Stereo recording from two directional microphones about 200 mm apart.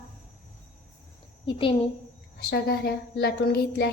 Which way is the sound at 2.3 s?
50° left (ahead or behind).